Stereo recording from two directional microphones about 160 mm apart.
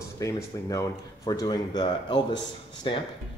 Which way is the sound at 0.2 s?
20° left (ahead or behind).